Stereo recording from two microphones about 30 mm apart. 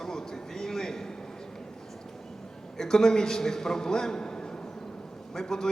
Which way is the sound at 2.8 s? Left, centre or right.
Centre.